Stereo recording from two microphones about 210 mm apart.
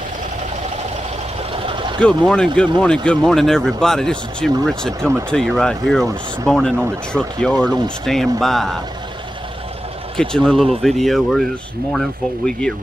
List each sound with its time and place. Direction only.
1.5 s vehicle: 25° right (ahead or behind)
2.0 s speech: 5° left (ahead or behind)
10.1 s speech: centre (ahead or behind)